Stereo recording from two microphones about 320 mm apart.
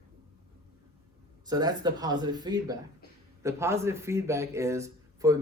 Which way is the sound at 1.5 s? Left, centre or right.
Centre.